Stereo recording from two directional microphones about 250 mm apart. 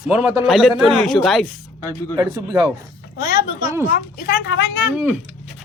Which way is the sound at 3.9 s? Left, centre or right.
Left.